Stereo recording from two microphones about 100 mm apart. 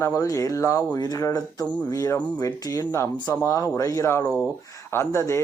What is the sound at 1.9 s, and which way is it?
Speech, 35° left (ahead or behind).